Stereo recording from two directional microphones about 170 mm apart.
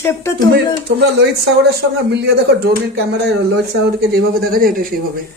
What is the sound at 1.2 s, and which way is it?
Speech, 80° right.